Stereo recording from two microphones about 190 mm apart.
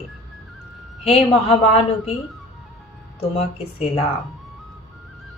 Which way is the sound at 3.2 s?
30° left (ahead or behind).